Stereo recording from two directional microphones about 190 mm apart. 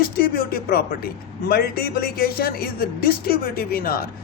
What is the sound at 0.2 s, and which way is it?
Speech, 50° left (ahead or behind).